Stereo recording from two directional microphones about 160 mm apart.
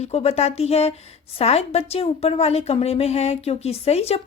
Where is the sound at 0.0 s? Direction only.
40° left (ahead or behind).